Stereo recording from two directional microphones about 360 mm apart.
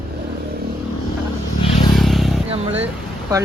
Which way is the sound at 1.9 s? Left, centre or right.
Centre.